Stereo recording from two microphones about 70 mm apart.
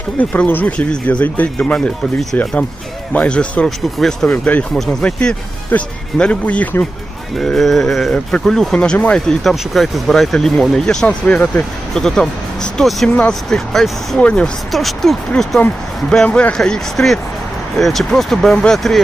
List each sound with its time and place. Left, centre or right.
0.2 s speech: left
3.9 s speech: centre
4.3 s speech: centre
4.7 s speech: centre
7.3 s speech: centre
8.8 s speech: centre
11.0 s speech: centre
14.2 s speech: centre
14.7 s speech: centre
18.5 s speech: centre
18.8 s speech: centre